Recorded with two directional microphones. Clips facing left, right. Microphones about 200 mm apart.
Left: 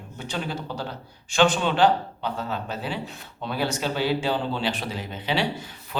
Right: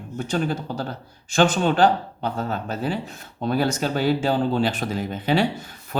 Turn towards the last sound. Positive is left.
turn(degrees=-45)  # may be behind; listen again after turning